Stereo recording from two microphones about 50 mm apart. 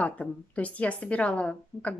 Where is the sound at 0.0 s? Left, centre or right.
Left.